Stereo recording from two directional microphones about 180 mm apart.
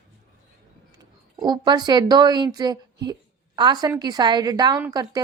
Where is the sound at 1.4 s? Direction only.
25° right (ahead or behind).